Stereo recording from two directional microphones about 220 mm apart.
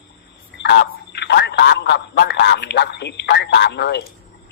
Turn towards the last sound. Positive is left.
turn(degrees=50)  # may be behind; listen again after turning